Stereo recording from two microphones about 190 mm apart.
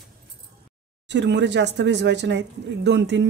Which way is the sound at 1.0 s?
70° right (ahead or behind).